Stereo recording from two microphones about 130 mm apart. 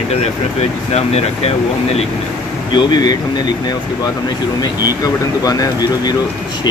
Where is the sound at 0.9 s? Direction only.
55° left (ahead or behind).